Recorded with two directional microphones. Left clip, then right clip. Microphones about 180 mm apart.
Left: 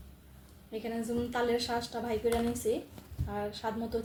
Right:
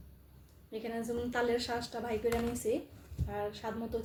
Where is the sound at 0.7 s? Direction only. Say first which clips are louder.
Left 2 dB; 25° right (ahead or behind).